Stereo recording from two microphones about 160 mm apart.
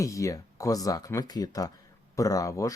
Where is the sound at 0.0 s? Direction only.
20° left (ahead or behind).